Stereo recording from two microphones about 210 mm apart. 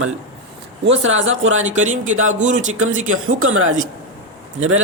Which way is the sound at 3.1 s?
75° right (ahead or behind).